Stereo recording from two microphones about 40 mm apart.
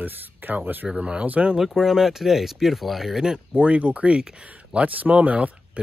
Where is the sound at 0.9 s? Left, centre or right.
Right.